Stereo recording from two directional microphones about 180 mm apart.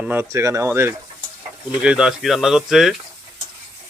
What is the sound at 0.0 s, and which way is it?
Speech, 10° right (ahead or behind).